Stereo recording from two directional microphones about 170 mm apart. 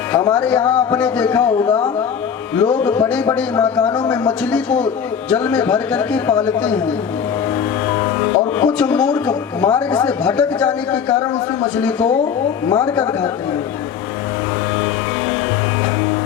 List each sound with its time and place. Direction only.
0.1 s speech: 10° left (ahead or behind)
8.5 s speech: 10° left (ahead or behind)